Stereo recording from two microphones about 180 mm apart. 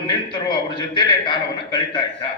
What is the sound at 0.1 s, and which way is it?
A man's voice, 25° left (ahead or behind).